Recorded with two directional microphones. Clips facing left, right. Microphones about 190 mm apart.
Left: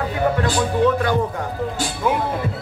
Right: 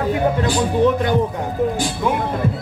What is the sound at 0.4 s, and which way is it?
Speech, 20° right (ahead or behind).